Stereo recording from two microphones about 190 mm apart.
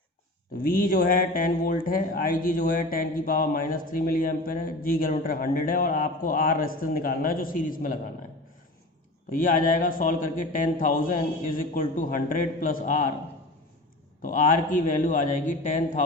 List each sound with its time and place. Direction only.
0.5 s speech: 50° left (ahead or behind)
9.3 s speech: 45° left (ahead or behind)
14.2 s speech: 45° left (ahead or behind)